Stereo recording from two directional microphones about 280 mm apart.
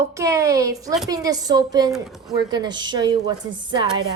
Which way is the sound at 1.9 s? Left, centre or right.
Centre.